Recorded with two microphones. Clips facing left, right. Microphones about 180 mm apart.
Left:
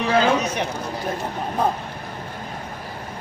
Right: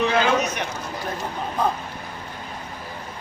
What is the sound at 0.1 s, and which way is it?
Speech, 30° left (ahead or behind).